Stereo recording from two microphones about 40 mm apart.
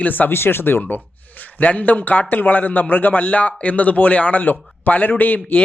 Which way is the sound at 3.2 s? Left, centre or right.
Left.